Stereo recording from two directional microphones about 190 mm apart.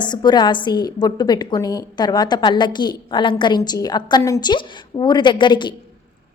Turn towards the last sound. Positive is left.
turn(degrees=25)  # may be behind; listen again after turning